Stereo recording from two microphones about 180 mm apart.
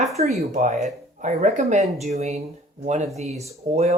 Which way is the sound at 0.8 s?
45° right (ahead or behind).